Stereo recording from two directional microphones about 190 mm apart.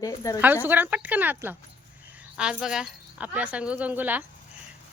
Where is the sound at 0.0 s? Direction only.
15° left (ahead or behind).